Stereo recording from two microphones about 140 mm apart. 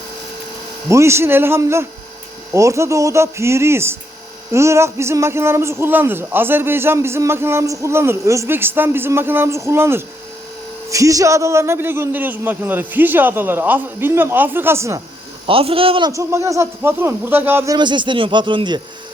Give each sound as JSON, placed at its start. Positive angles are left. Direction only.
{"t": 0.9, "sound": "a man's voice", "side_deg": -20}
{"t": 15.4, "sound": "speech", "side_deg": -40}
{"t": 16.0, "sound": "a man's voice", "side_deg": -20}
{"t": 17.7, "sound": "speech", "side_deg": -35}